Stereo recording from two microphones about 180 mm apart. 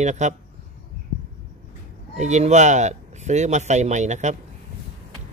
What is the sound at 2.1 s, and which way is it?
Speech, 40° right (ahead or behind).